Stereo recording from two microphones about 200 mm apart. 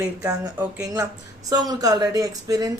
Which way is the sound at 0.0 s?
10° right (ahead or behind).